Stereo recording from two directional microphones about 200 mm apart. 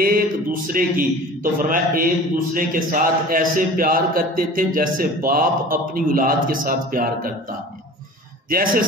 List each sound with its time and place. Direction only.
0.0 s a man's voice: 45° right (ahead or behind)
8.5 s a man's voice: 45° right (ahead or behind)